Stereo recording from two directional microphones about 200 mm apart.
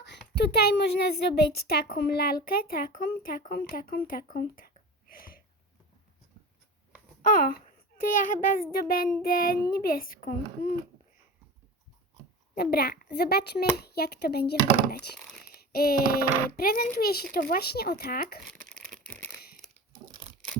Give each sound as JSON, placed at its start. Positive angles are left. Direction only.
{"t": 0.0, "sound": "a woman's voice", "side_deg": 55}
{"t": 8.1, "sound": "a woman's voice", "side_deg": 40}
{"t": 12.5, "sound": "a woman's voice", "side_deg": 50}
{"t": 18.4, "sound": "crumpling", "side_deg": 5}